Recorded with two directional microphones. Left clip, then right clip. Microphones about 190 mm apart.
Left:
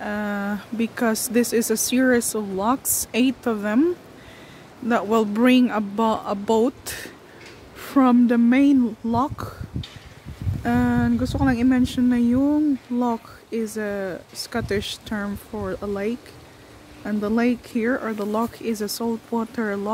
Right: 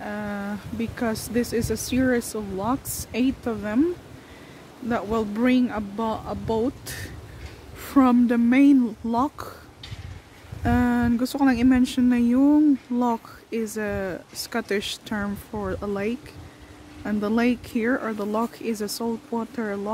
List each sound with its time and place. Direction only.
0.0 s speech: 20° left (ahead or behind)
4.8 s speech: 25° left (ahead or behind)
7.8 s speech: 10° left (ahead or behind)